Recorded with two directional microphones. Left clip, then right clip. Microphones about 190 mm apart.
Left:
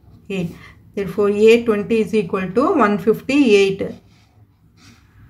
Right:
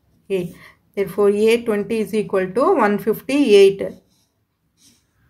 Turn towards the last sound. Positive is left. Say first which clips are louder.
# right 2 dB
turn(degrees=-30)  # may be behind; listen again after turning